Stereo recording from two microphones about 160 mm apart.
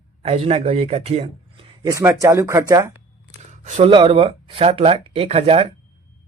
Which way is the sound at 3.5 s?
50° right (ahead or behind).